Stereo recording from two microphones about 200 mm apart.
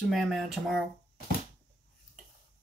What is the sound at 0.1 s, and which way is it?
Speech, centre (ahead or behind).